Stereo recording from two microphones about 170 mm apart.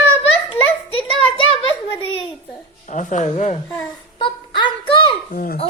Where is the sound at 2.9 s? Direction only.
45° left (ahead or behind).